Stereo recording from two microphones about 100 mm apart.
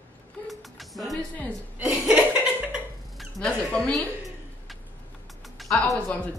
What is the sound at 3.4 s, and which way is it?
A woman's voice, 5° left (ahead or behind).